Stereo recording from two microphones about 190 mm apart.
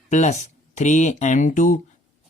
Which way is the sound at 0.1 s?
35° left (ahead or behind).